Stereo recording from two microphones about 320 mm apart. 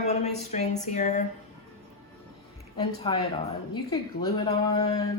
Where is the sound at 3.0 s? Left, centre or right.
Centre.